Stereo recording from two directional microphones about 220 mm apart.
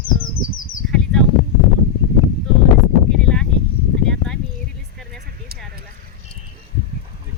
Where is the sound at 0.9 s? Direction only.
Centre (ahead or behind).